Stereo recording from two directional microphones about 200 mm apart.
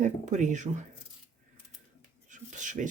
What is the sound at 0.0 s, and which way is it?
Speech, 35° right (ahead or behind).